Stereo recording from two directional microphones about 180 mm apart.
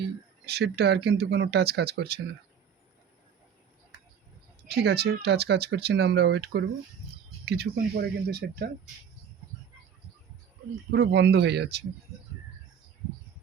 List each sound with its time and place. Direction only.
0.4 s speech: 65° right (ahead or behind)
4.7 s speech: 65° right (ahead or behind)
10.9 s speech: 75° right (ahead or behind)